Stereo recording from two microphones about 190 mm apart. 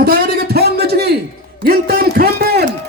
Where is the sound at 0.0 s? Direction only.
55° right (ahead or behind).